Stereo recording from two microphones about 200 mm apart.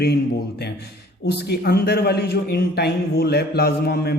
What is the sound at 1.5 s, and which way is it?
A man's voice, 50° left (ahead or behind).